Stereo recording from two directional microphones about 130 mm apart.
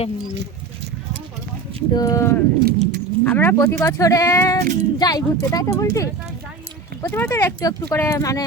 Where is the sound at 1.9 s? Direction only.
30° left (ahead or behind).